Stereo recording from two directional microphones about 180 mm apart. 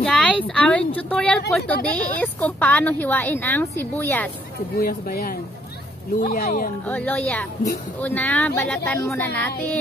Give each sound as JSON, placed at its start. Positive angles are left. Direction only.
{"t": 0.1, "sound": "a sound", "side_deg": 5}
{"t": 0.6, "sound": "a woman's voice", "side_deg": 5}
{"t": 4.7, "sound": "speech", "side_deg": 55}
{"t": 6.9, "sound": "a woman's voice", "side_deg": 10}